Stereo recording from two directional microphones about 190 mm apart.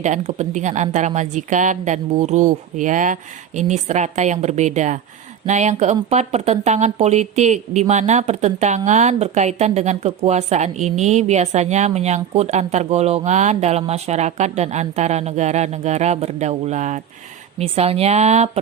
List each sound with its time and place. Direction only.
0.0 s speech: 40° right (ahead or behind)